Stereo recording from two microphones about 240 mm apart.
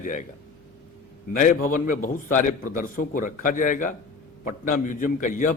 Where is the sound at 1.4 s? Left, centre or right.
Left.